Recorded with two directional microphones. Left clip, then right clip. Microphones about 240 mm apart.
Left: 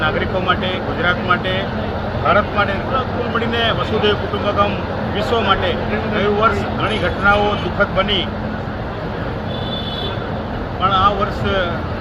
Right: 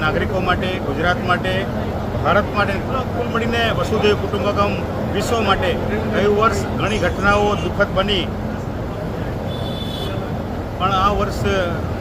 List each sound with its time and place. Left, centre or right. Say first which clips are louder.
0.0 s speech: left 1 dB; centre
10.8 s speech: left 3 dB; centre